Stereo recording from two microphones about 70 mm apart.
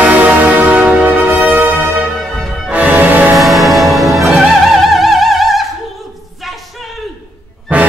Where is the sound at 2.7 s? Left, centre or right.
Right.